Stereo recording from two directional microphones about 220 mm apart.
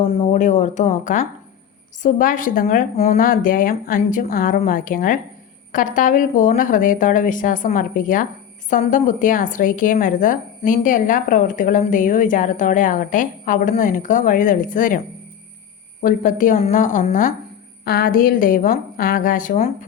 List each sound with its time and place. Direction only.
0.0 s a woman's voice: 30° left (ahead or behind)